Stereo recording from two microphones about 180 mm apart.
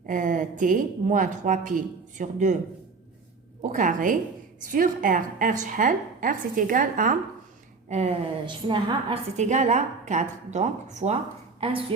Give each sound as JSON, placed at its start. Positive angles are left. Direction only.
{"t": 0.0, "sound": "a woman's voice", "side_deg": -45}
{"t": 3.6, "sound": "a woman's voice", "side_deg": -45}
{"t": 8.4, "sound": "a woman's voice", "side_deg": -25}